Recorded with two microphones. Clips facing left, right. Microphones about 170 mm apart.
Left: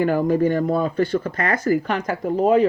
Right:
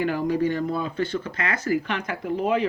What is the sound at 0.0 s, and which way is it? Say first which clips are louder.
Speech: left 5 dB; 45° left (ahead or behind).